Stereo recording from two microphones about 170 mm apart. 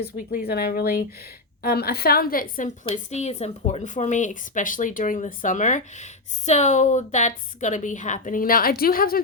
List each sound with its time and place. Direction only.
0.0 s a woman's voice: 60° left (ahead or behind)
2.9 s a woman's voice: 40° left (ahead or behind); by 9.2 s 60° left (ahead or behind)